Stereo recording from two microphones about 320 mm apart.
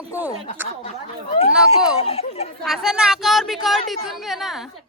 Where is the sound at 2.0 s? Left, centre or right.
Centre.